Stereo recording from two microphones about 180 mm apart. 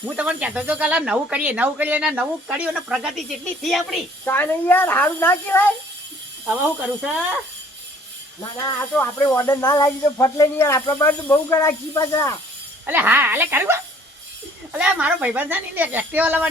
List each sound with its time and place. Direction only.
0.2 s speech: 5° right (ahead or behind); by 5.7 s 10° left (ahead or behind)
6.5 s speech: 5° right (ahead or behind)
9.0 s speech: 15° left (ahead or behind)
12.8 s speech: 10° right (ahead or behind)
14.8 s speech: 5° right (ahead or behind)